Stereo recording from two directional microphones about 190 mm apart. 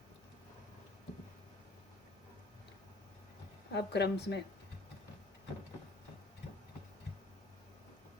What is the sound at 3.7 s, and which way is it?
Speech, 60° left (ahead or behind).